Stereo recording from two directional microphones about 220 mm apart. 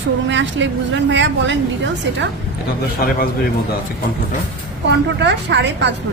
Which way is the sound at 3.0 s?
45° left (ahead or behind).